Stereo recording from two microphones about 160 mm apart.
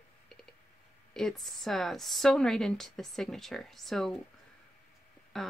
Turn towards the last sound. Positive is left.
turn(degrees=0)  # may be behind; listen again after turning